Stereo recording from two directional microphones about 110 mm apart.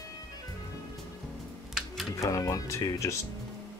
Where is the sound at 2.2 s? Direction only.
30° left (ahead or behind).